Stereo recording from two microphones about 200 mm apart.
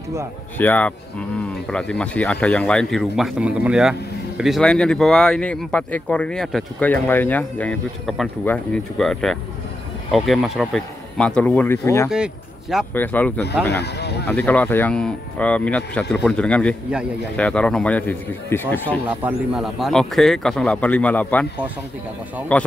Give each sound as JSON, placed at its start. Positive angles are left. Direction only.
{"t": 0.6, "sound": "speech", "side_deg": 10}
{"t": 12.1, "sound": "speech", "side_deg": 0}
{"t": 12.9, "sound": "speech", "side_deg": 10}
{"t": 13.7, "sound": "speech", "side_deg": 55}
{"t": 14.2, "sound": "speech", "side_deg": 5}
{"t": 18.9, "sound": "speech", "side_deg": -10}
{"t": 22.5, "sound": "speech", "side_deg": 5}